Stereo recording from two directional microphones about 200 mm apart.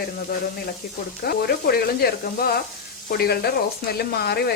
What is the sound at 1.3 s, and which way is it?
Speech, 50° left (ahead or behind).